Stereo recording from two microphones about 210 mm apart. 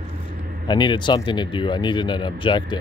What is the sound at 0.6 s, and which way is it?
Speech, 20° left (ahead or behind).